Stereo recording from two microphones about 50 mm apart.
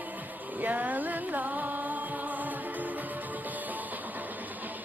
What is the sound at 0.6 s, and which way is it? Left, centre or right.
Music, right.